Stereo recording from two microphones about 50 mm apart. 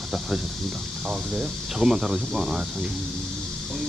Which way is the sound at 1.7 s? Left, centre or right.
Centre.